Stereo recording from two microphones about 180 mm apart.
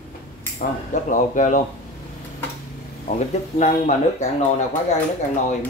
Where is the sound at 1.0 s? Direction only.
45° left (ahead or behind).